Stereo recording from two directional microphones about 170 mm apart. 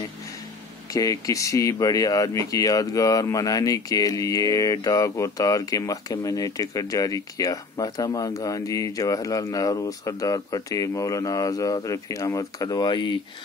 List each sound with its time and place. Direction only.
0.8 s speech: 20° left (ahead or behind)